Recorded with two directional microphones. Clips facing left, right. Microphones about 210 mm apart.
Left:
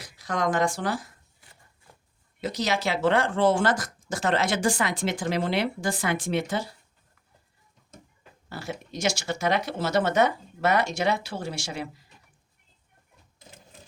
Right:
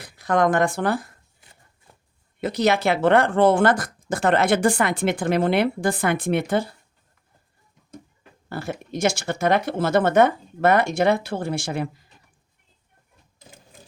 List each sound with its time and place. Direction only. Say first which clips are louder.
0.0 s speech: right 7 dB; 55° right (ahead or behind)
2.4 s speech: right 7 dB; 60° right (ahead or behind)
8.4 s speech: right 5 dB; 55° right (ahead or behind)